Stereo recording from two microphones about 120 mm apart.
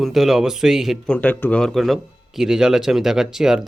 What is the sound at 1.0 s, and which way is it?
Speech, 10° left (ahead or behind).